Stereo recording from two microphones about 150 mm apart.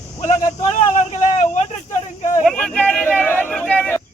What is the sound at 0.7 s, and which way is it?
Vehicle, 50° left (ahead or behind).